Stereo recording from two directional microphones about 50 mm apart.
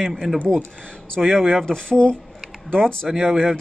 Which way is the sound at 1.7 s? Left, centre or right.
Centre.